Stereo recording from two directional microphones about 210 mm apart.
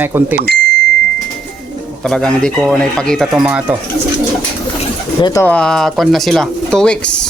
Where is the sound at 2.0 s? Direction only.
5° left (ahead or behind).